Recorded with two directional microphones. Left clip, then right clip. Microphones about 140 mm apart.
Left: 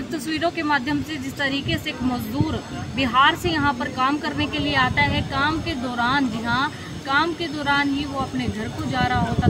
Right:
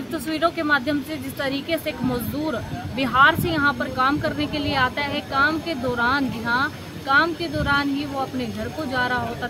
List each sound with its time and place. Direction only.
0.3 s a woman's voice: 20° right (ahead or behind)
3.0 s a woman's voice: 25° right (ahead or behind)
8.9 s a woman's voice: 25° right (ahead or behind)